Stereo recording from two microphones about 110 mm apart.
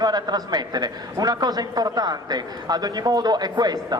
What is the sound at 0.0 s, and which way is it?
A man's voice, 35° right (ahead or behind).